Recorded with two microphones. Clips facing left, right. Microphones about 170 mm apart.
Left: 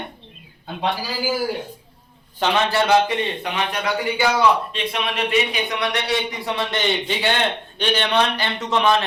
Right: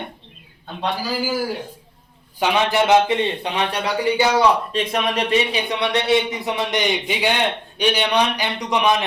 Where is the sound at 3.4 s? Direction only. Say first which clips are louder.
Right 1 dB; 30° right (ahead or behind); by 9.0 s 15° right (ahead or behind).